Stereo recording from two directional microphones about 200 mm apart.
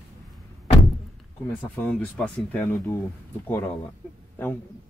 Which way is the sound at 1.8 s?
5° left (ahead or behind).